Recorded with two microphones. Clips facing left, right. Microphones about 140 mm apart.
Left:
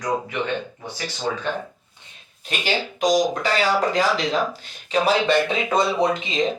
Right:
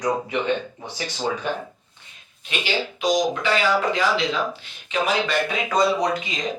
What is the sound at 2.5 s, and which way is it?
Speech, 40° left (ahead or behind).